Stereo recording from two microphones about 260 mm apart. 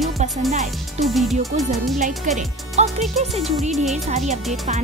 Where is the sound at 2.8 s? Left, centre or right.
Right.